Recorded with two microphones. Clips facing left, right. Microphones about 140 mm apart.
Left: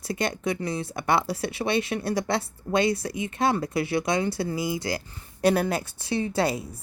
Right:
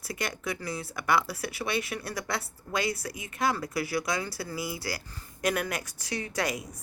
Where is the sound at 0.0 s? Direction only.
25° left (ahead or behind).